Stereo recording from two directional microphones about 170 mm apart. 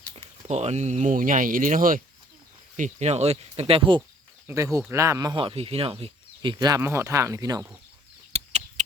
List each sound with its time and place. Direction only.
0.4 s speech: 40° right (ahead or behind)
4.4 s speech: 20° right (ahead or behind)
8.3 s chicken: 35° right (ahead or behind)